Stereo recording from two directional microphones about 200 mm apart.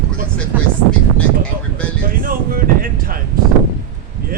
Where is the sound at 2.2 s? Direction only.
45° right (ahead or behind).